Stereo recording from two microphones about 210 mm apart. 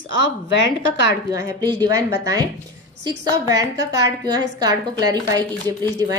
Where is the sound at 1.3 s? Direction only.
20° right (ahead or behind).